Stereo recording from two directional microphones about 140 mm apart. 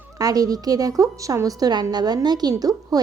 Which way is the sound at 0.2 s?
25° right (ahead or behind).